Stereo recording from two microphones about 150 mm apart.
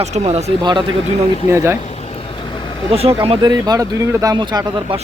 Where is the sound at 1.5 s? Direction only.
15° right (ahead or behind).